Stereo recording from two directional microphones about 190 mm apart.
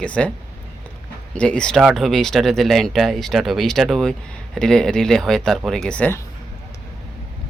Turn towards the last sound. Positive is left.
turn(degrees=5)  # may be behind; listen again after turning